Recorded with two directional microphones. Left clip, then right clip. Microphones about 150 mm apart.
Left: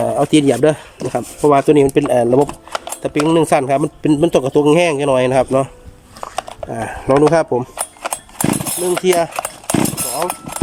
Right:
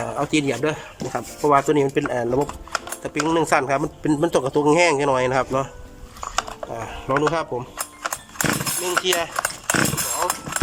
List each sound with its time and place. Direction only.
0.0 s speech: 40° left (ahead or behind)
6.7 s speech: 45° left (ahead or behind)
7.8 s horse: 25° left (ahead or behind)
9.0 s speech: 40° left (ahead or behind)
9.3 s horse: 25° left (ahead or behind)